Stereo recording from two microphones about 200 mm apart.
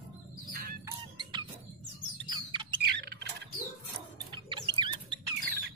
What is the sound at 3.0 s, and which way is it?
Squawk, 55° right (ahead or behind).